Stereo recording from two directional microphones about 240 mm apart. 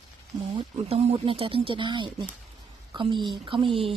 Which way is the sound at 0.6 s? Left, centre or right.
Right.